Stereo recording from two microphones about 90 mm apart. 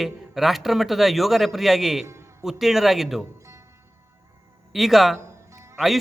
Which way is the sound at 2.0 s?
30° right (ahead or behind).